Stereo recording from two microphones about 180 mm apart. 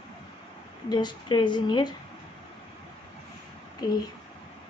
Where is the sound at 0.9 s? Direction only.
25° left (ahead or behind).